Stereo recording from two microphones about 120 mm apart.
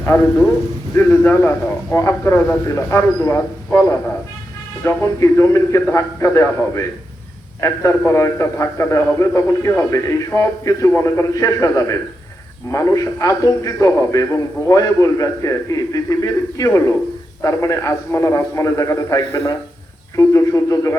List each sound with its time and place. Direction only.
0.0 s a man's voice: 15° left (ahead or behind)